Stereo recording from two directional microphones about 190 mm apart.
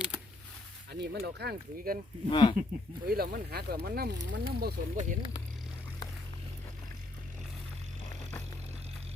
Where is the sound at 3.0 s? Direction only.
55° right (ahead or behind).